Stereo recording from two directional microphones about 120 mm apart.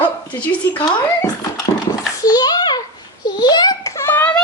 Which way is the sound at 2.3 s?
35° left (ahead or behind).